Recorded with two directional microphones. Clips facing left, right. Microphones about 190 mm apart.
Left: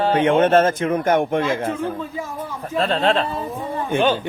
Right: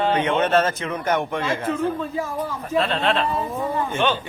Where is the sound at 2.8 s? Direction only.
40° left (ahead or behind).